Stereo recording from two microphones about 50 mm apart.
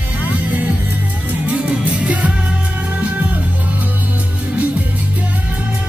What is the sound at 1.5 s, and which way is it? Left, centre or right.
Music, right.